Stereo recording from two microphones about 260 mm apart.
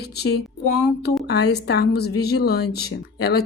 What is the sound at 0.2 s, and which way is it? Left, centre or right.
Speech, left.